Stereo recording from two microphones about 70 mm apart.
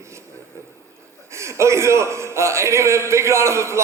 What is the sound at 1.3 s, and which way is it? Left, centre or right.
A man's voice, right.